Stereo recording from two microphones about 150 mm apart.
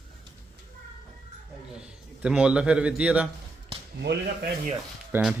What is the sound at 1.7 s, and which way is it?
A man's voice, 5° right (ahead or behind).